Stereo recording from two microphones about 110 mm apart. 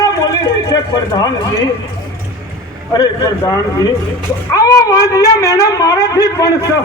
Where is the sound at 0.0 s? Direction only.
35° left (ahead or behind).